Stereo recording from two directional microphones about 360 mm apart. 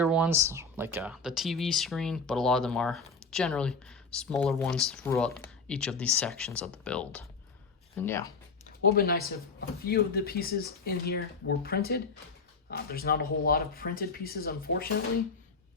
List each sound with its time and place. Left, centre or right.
0.0 s speech: centre
8.9 s speech: left